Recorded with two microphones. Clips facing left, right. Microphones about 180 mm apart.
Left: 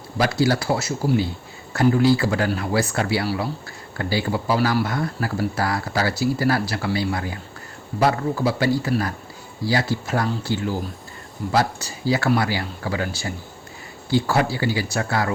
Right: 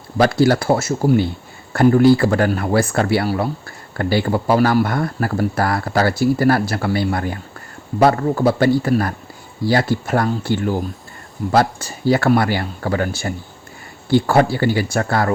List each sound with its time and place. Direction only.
0.2 s speech: 55° right (ahead or behind)